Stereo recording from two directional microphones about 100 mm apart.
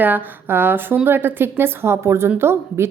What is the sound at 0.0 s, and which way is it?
A woman's voice, 20° right (ahead or behind).